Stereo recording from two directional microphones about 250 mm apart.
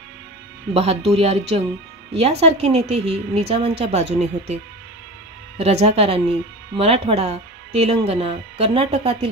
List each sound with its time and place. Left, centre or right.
0.7 s speech: right
5.6 s speech: right